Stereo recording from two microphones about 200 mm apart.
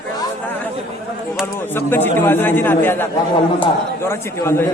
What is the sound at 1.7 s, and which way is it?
A man's voice, 10° left (ahead or behind).